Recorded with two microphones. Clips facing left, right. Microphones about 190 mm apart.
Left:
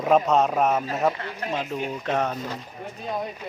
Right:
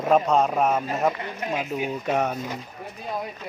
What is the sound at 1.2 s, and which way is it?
Speech, 15° right (ahead or behind).